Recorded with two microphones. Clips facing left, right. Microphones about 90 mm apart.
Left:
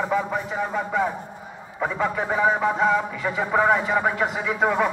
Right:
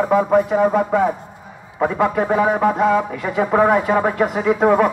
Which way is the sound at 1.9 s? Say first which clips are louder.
Right 6 dB; 70° right (ahead or behind).